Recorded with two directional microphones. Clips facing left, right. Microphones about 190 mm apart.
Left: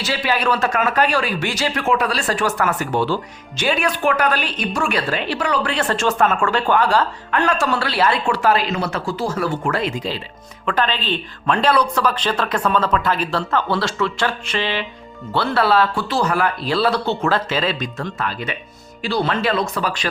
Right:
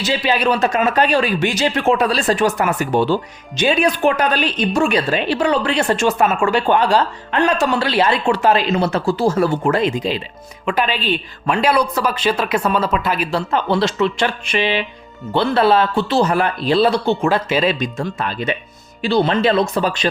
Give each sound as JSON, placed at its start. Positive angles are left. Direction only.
{"t": 0.0, "sound": "a woman's voice", "side_deg": -20}